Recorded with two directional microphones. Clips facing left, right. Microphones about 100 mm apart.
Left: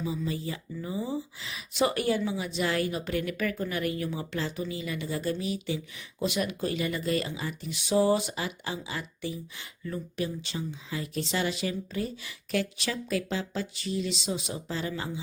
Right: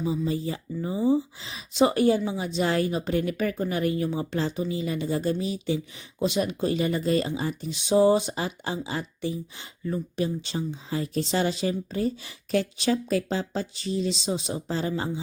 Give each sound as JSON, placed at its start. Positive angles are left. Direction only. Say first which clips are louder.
{"t": 0.0, "sound": "speech", "louder": "right 5 dB", "side_deg": -30}